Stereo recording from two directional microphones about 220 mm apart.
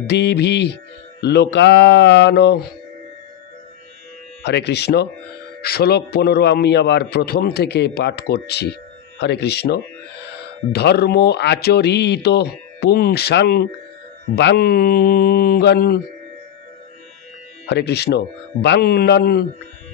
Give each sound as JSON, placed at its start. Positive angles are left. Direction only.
{"t": 0.0, "sound": "a man's voice", "side_deg": 50}
{"t": 4.4, "sound": "a man's voice", "side_deg": 50}
{"t": 17.6, "sound": "a man's voice", "side_deg": 50}